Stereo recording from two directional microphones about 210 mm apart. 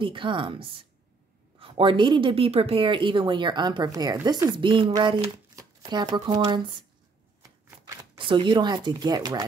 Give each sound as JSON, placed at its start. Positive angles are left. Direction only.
{"t": 0.0, "sound": "a woman's voice", "side_deg": -25}
{"t": 7.8, "sound": "speech", "side_deg": -20}